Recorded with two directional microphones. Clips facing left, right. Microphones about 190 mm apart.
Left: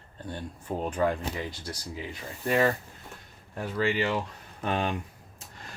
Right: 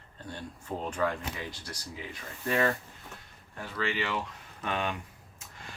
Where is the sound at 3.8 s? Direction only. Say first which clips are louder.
Left 4 dB; 35° left (ahead or behind).